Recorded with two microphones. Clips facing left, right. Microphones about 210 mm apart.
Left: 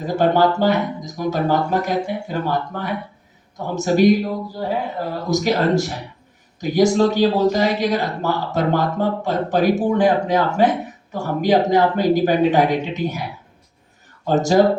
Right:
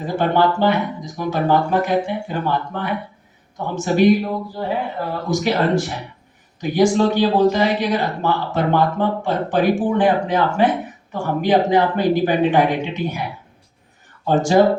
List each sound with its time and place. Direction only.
0.0 s speech: 45° left (ahead or behind)
14.3 s speech: 40° left (ahead or behind)